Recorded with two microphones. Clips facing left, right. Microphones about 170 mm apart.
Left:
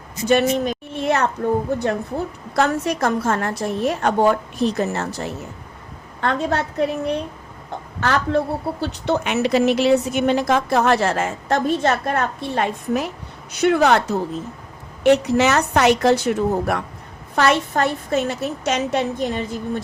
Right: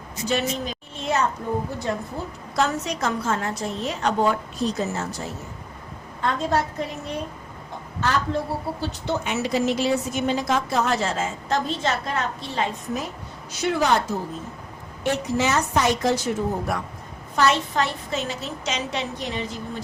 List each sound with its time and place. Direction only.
0.3 s a woman's voice: 55° left (ahead or behind)
2.6 s a woman's voice: 55° left (ahead or behind)